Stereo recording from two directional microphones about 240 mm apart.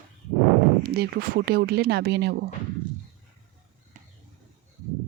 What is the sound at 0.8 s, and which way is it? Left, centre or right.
Speech, right.